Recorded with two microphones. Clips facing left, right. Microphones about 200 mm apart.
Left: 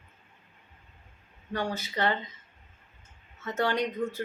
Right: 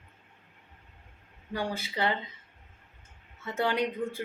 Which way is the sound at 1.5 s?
10° right (ahead or behind).